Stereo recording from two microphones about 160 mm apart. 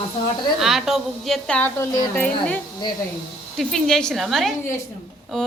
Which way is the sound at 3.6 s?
5° left (ahead or behind).